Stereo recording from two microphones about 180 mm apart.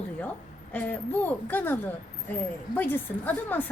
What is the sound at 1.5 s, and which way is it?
Speech, 10° left (ahead or behind).